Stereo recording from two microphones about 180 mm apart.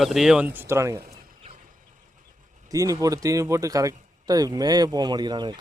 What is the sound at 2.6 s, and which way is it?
Speech, 20° right (ahead or behind).